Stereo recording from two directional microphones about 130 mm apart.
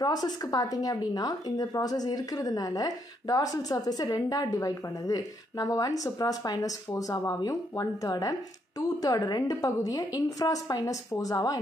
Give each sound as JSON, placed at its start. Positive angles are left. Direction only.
{"t": 0.0, "sound": "a woman's voice", "side_deg": 30}